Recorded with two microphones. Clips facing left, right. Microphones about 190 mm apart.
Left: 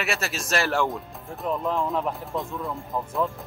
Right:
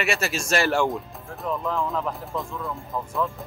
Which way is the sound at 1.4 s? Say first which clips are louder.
Left 1 dB; 15° left (ahead or behind).